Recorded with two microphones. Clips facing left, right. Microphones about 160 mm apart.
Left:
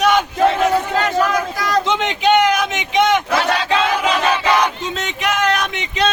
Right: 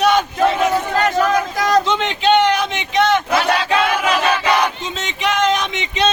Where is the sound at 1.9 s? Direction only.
10° left (ahead or behind).